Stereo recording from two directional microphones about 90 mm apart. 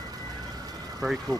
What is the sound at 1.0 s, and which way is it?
Speech, 5° right (ahead or behind).